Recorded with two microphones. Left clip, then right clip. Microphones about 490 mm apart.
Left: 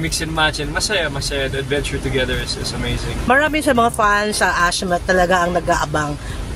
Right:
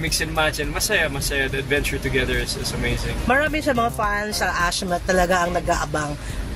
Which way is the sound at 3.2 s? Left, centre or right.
Right.